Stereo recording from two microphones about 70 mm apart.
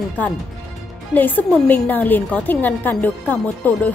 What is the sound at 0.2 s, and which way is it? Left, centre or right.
A woman's voice, left.